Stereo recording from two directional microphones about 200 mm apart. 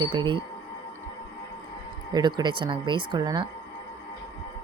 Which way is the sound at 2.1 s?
20° right (ahead or behind).